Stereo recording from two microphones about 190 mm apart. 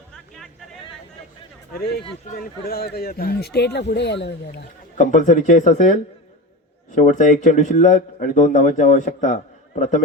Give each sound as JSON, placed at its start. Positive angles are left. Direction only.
{"t": 1.7, "sound": "speech", "side_deg": 55}
{"t": 4.9, "sound": "speech", "side_deg": 40}